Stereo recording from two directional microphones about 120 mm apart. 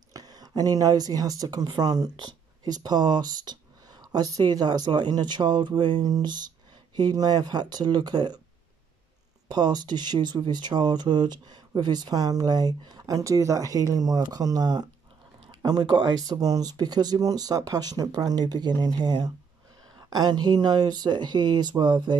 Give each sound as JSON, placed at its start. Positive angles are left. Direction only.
{"t": 0.1, "sound": "speech", "side_deg": -35}
{"t": 9.5, "sound": "speech", "side_deg": -35}